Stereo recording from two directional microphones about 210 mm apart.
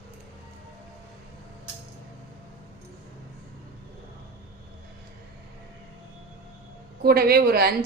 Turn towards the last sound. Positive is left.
turn(degrees=-45)  # may be behind; listen again after turning